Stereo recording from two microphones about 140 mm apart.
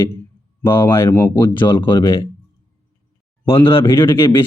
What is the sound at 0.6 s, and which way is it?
Speech, 15° left (ahead or behind).